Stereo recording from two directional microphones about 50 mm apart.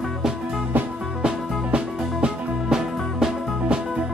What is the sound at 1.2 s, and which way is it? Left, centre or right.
Music, centre.